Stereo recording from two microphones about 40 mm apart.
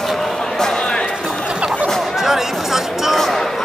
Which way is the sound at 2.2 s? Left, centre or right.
Centre.